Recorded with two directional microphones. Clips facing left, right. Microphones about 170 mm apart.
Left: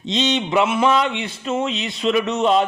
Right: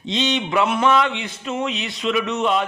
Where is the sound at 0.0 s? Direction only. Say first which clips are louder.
Left 2 dB; 25° left (ahead or behind).